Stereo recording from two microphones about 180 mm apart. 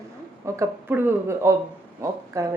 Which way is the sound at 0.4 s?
15° right (ahead or behind).